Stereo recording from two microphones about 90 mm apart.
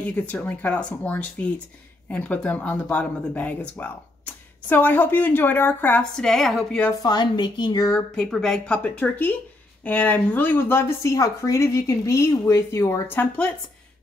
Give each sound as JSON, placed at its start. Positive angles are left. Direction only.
{"t": 0.0, "sound": "speech", "side_deg": 15}
{"t": 6.1, "sound": "a woman's voice", "side_deg": 5}
{"t": 6.9, "sound": "speech", "side_deg": 45}
{"t": 8.2, "sound": "speech", "side_deg": 5}